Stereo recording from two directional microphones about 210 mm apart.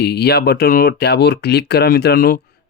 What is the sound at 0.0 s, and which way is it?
Speech, 50° left (ahead or behind).